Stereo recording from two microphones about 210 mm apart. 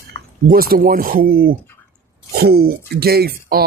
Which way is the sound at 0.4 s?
45° right (ahead or behind).